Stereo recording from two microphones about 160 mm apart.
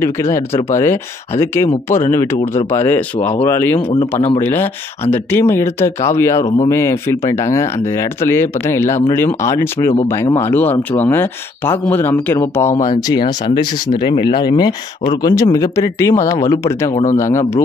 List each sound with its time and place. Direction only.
0.0 s speech: 15° left (ahead or behind)
12.7 s speech: 55° left (ahead or behind)
13.9 s speech: 30° left (ahead or behind)